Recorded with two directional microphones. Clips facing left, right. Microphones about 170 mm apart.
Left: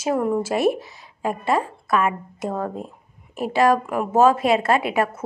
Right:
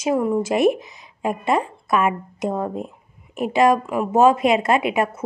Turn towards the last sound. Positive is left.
turn(degrees=-15)  # may be behind; listen again after turning